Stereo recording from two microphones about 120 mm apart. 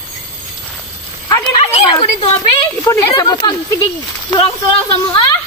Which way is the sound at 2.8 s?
30° left (ahead or behind).